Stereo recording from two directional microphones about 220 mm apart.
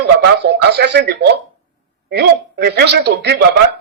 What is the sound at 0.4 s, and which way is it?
A man's voice, 50° right (ahead or behind).